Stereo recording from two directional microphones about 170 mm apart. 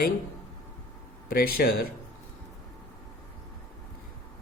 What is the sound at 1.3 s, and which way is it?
Speech, 60° left (ahead or behind).